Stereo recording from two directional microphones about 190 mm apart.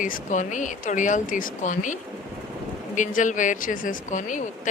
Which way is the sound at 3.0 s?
40° left (ahead or behind).